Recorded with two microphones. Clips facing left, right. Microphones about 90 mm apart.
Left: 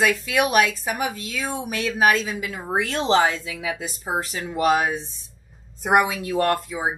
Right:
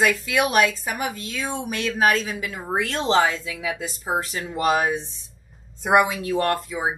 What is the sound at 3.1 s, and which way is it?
Speech, 30° left (ahead or behind).